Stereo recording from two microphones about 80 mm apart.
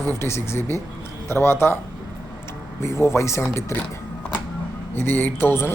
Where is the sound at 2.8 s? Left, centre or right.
Left.